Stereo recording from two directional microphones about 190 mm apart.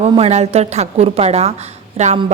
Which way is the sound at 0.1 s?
35° right (ahead or behind).